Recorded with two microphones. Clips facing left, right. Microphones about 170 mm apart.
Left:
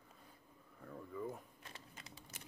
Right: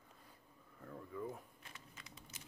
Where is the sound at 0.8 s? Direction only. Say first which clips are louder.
Left 1 dB; centre (ahead or behind).